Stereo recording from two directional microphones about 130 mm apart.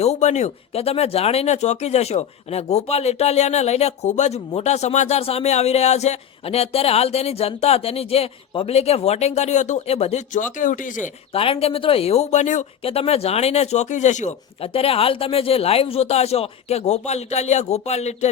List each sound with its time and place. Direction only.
0.0 s speech: 60° left (ahead or behind)
10.3 s speech: 85° left
11.3 s speech: 45° left (ahead or behind); by 12.6 s 65° left (ahead or behind)
12.8 s speech: 50° left (ahead or behind); by 14.3 s 65° left (ahead or behind)
14.6 s speech: 50° left (ahead or behind)